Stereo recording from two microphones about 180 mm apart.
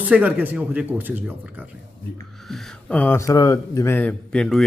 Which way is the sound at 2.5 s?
5° left (ahead or behind).